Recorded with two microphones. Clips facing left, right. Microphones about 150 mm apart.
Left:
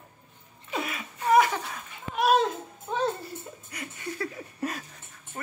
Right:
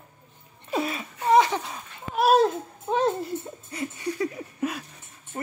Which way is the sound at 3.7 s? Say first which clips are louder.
Right 7 dB; 20° right (ahead or behind).